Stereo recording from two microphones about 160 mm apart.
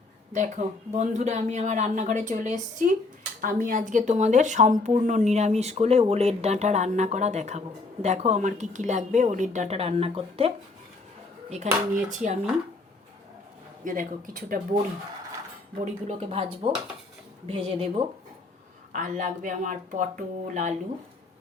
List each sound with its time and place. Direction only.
0.3 s speech: 50° right (ahead or behind)
11.6 s speech: 50° right (ahead or behind)
13.8 s speech: 55° right (ahead or behind)
15.8 s speech: 40° right (ahead or behind)
18.9 s speech: 55° right (ahead or behind)